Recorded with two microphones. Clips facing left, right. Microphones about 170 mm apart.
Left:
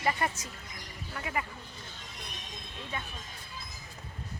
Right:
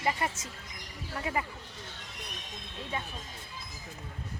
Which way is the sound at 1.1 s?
35° right (ahead or behind).